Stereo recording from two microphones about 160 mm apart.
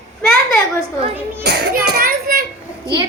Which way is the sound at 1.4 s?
80° right.